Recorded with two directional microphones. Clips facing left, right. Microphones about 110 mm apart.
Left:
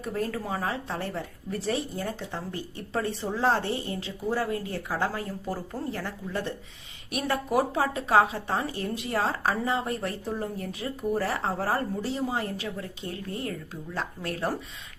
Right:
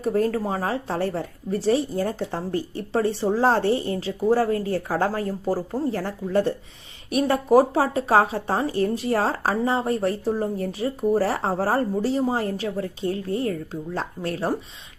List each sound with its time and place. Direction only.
0.0 s speech: 40° right (ahead or behind)